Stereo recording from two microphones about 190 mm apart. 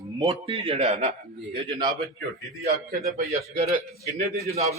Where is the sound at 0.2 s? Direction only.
20° right (ahead or behind).